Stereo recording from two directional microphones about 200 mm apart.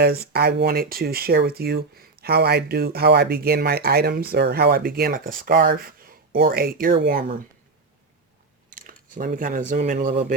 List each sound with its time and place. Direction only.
0.0 s speech: 50° right (ahead or behind)
8.7 s speech: 40° right (ahead or behind)